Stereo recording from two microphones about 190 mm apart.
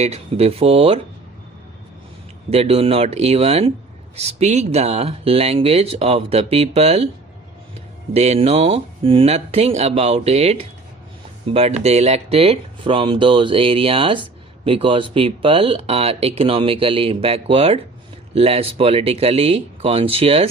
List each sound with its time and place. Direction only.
0.0 s speech: 35° right (ahead or behind)
2.5 s speech: 30° right (ahead or behind)
8.1 s speech: 35° right (ahead or behind)